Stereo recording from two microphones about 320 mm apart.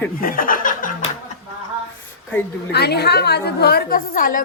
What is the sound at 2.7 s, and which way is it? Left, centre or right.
A woman's voice, left.